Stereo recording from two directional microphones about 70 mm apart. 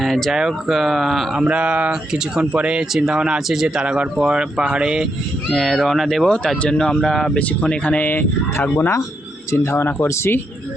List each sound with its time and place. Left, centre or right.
0.0 s speech: centre
1.5 s speech: centre
2.9 s speech: centre
5.5 s speech: centre
7.3 s speech: centre